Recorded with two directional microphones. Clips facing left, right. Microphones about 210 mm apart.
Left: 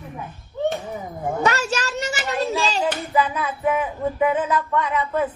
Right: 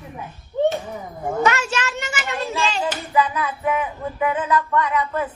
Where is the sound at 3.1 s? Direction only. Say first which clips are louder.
Right 3 dB; 25° left (ahead or behind).